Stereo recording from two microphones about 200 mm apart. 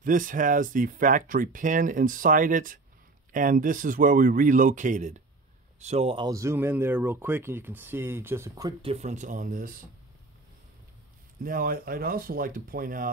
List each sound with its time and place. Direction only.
0.0 s speech: 40° right (ahead or behind); by 8.7 s 15° right (ahead or behind)
8.8 s speech: 35° right (ahead or behind)
11.4 s speech: 45° right (ahead or behind)